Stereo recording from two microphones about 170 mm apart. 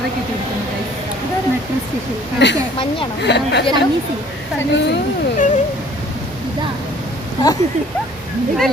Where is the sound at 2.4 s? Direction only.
90° left.